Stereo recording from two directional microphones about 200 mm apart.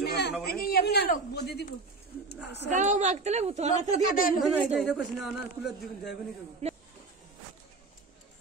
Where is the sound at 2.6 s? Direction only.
35° right (ahead or behind).